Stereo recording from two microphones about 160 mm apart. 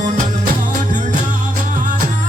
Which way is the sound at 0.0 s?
55° right (ahead or behind).